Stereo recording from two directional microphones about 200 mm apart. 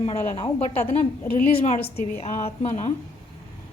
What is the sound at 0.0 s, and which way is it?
A woman's voice, 30° left (ahead or behind).